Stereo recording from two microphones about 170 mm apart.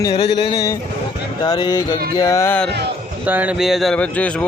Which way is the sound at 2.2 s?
20° left (ahead or behind).